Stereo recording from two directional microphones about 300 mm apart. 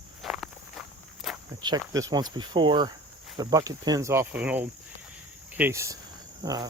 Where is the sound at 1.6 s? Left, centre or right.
Centre.